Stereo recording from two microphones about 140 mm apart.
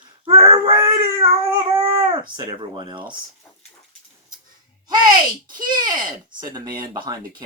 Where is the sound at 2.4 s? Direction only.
30° right (ahead or behind).